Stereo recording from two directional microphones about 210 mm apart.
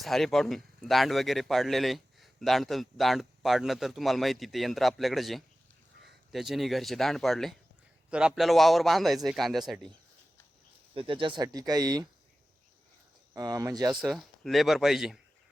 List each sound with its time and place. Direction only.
0.0 s speech: centre (ahead or behind)
10.9 s speech: 25° right (ahead or behind)
13.3 s speech: 15° right (ahead or behind)
14.0 s speech: centre (ahead or behind)